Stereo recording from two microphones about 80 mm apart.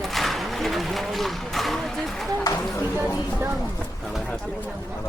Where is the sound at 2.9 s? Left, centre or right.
Right.